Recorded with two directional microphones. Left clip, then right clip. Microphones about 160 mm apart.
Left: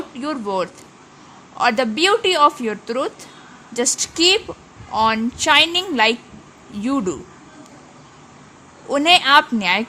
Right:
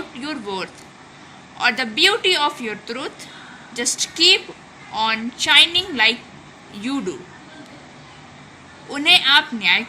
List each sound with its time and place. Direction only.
0.2 s a woman's voice: 45° left (ahead or behind)
8.9 s a woman's voice: 50° left (ahead or behind)